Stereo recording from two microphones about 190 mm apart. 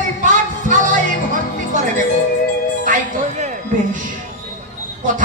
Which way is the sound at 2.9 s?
40° right (ahead or behind).